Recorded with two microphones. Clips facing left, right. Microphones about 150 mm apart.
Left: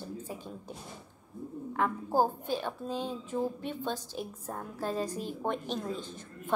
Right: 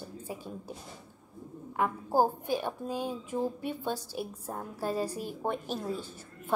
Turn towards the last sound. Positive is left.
turn(degrees=-10)  # may be behind; listen again after turning